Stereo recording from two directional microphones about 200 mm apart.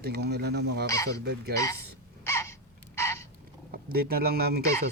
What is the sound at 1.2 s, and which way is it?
Speech, 55° right (ahead or behind).